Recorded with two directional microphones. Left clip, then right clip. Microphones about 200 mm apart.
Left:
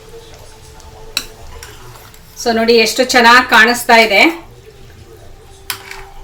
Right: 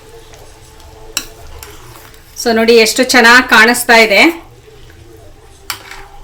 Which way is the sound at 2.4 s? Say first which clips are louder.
Right 3 dB; 45° right (ahead or behind).